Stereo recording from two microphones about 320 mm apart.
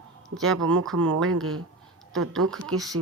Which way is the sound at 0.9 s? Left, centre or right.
Right.